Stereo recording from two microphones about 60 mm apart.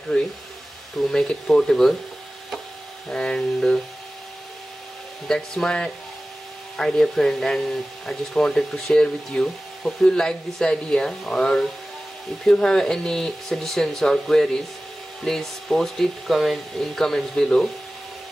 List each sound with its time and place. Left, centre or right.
0.9 s speech: centre
3.1 s speech: centre
5.3 s speech: centre
8.4 s speech: centre